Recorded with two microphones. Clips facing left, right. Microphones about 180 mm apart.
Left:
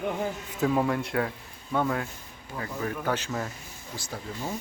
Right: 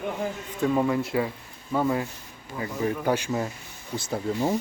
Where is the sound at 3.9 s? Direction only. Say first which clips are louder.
Right 9 dB; 25° right (ahead or behind).